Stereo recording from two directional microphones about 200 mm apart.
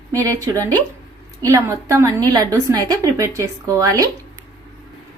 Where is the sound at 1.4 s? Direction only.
15° right (ahead or behind).